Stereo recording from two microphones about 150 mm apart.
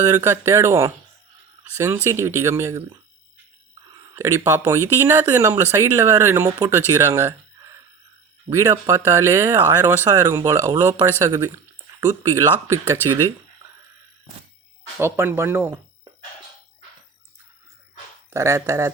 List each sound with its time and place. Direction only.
0.1 s speech: 20° right (ahead or behind)
4.1 s speech: 20° right (ahead or behind)
14.9 s speech: 15° right (ahead or behind)
18.3 s speech: 20° right (ahead or behind)